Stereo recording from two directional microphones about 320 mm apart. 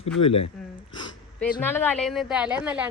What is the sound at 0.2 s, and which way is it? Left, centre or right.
Speech, left.